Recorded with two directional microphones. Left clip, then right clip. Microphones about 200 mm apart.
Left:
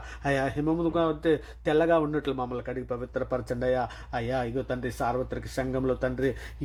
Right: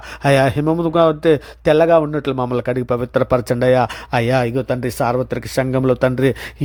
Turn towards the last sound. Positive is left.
turn(degrees=-45)  # may be behind; listen again after turning